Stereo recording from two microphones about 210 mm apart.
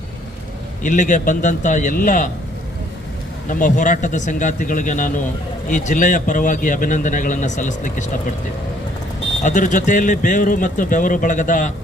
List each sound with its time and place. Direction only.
0.8 s a man's voice: 35° left (ahead or behind)
3.5 s a man's voice: 35° left (ahead or behind)
9.4 s a man's voice: 35° left (ahead or behind)